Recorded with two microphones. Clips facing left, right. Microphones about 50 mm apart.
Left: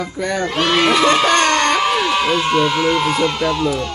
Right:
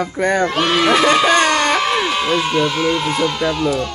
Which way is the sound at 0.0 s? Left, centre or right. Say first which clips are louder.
Right 4 dB; right.